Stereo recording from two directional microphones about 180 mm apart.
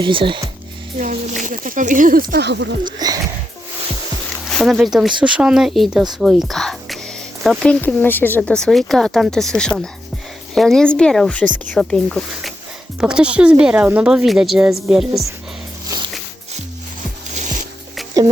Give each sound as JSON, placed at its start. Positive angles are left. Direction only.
{"t": 0.0, "sound": "speech", "side_deg": -30}
{"t": 0.9, "sound": "speech", "side_deg": -45}
{"t": 3.0, "sound": "speech", "side_deg": -20}
{"t": 4.4, "sound": "speech", "side_deg": 0}
{"t": 17.3, "sound": "music", "side_deg": -40}